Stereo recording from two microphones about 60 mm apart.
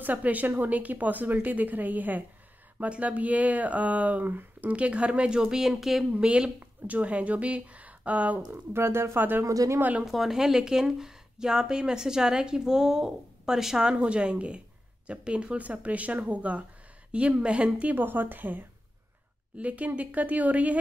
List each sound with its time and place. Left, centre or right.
0.0 s speech: right; by 6.0 s centre
6.1 s speech: centre
8.7 s speech: right
10.0 s speech: centre; by 17.9 s right
17.9 s speech: right